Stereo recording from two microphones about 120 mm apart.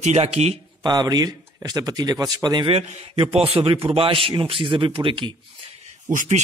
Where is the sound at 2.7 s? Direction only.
55° right (ahead or behind).